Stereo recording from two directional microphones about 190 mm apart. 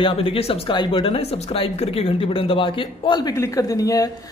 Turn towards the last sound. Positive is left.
turn(degrees=20)  # may be behind; listen again after turning